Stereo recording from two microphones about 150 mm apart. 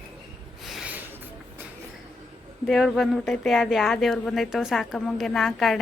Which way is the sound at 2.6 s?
Centre (ahead or behind).